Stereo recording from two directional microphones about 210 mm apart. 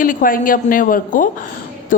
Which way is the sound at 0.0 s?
40° left (ahead or behind).